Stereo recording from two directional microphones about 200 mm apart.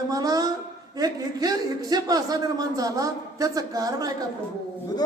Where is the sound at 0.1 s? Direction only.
20° right (ahead or behind).